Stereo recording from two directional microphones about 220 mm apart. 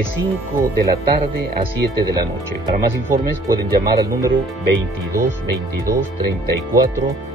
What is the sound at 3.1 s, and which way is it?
Speech, 15° right (ahead or behind).